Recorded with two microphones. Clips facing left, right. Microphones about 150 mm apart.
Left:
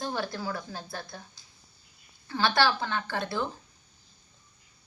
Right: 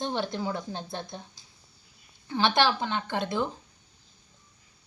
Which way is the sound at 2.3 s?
20° right (ahead or behind).